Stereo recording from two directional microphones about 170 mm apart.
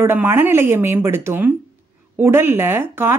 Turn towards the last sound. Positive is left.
turn(degrees=-15)  # may be behind; listen again after turning